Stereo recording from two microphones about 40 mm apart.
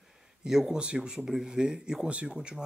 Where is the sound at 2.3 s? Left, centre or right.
Centre.